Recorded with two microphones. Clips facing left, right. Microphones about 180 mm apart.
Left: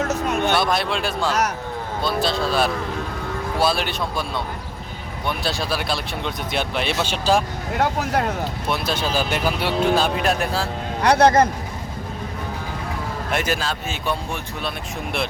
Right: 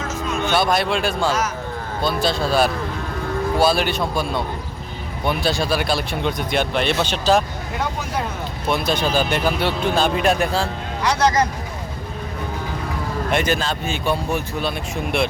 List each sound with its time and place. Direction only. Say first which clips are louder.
0.0 s a sound: left 3 dB; 65° left (ahead or behind)
0.5 s speech: right 2 dB; centre (ahead or behind)
7.8 s speech: left 4 dB; 70° left (ahead or behind)
8.7 s speech: right 4 dB; 5° left (ahead or behind)
11.0 s a man's voice: left 4 dB; 60° left (ahead or behind)
13.3 s speech: right 3 dB; 5° left (ahead or behind)